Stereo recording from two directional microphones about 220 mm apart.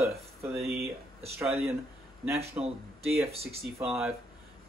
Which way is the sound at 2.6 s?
10° right (ahead or behind).